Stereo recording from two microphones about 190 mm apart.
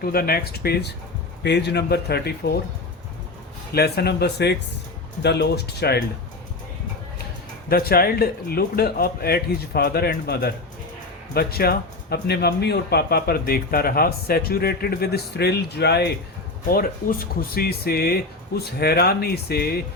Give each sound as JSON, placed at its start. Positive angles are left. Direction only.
{"t": 0.0, "sound": "speech", "side_deg": 50}
{"t": 3.7, "sound": "speech", "side_deg": 55}
{"t": 7.7, "sound": "speech", "side_deg": 55}